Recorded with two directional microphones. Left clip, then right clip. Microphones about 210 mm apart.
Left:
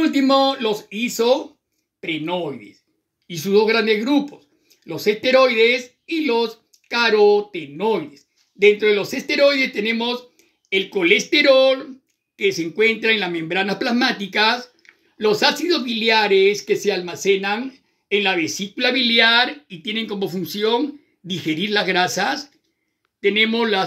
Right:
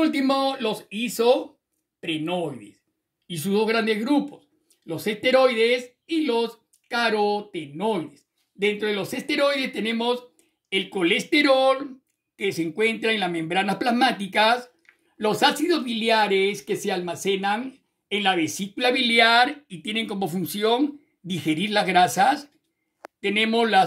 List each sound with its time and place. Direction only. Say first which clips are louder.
0.0 s speech: left 6 dB; 45° right (ahead or behind)